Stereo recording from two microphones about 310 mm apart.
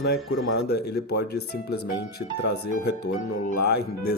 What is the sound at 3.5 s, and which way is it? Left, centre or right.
Speech, left.